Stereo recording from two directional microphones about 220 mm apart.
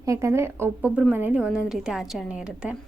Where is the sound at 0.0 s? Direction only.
15° right (ahead or behind).